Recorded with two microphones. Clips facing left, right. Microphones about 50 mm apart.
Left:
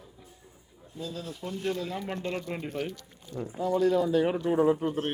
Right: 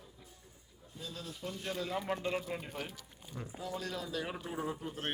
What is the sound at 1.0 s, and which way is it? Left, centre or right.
Speech, centre.